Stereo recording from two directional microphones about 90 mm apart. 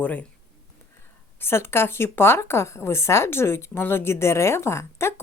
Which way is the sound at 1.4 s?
25° left (ahead or behind).